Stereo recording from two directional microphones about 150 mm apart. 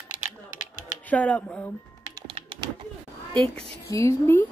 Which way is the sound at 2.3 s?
40° right (ahead or behind).